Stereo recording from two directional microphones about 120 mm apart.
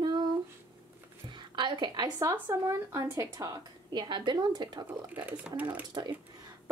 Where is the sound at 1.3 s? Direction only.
40° right (ahead or behind).